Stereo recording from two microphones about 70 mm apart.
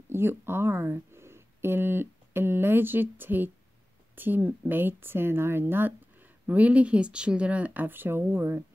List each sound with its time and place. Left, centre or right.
0.1 s speech: right